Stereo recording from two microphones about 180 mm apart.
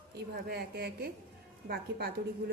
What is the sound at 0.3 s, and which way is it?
A woman's voice, 60° right (ahead or behind).